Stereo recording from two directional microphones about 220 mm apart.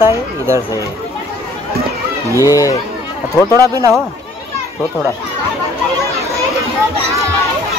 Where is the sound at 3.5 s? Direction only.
15° right (ahead or behind).